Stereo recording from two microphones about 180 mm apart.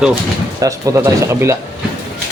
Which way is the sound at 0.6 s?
20° right (ahead or behind).